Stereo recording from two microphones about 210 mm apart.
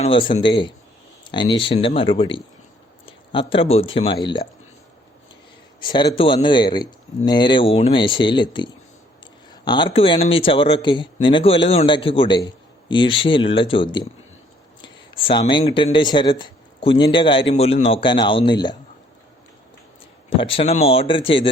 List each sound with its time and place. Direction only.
0.0 s speech: 25° left (ahead or behind)
5.8 s speech: 20° left (ahead or behind)
20.4 s speech: 25° left (ahead or behind)